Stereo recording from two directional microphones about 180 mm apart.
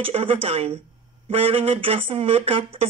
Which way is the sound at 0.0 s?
30° right (ahead or behind).